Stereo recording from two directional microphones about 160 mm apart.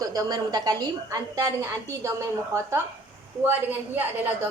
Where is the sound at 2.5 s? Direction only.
20° right (ahead or behind).